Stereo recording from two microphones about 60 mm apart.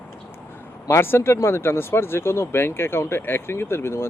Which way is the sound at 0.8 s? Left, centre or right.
Left.